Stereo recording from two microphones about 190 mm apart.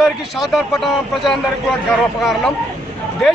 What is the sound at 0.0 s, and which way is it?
A man's voice, centre (ahead or behind).